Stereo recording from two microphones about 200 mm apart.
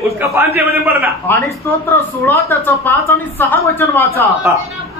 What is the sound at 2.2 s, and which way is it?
A woman's voice, 10° left (ahead or behind).